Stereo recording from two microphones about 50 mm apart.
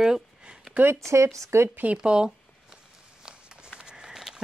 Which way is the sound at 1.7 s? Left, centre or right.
Right.